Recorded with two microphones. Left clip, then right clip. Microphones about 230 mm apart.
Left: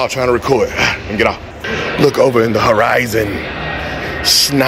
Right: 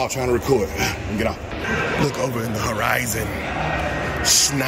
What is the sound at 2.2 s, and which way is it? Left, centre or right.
Speech, left.